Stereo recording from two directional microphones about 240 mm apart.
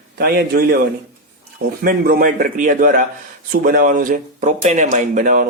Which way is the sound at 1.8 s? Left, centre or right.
Right.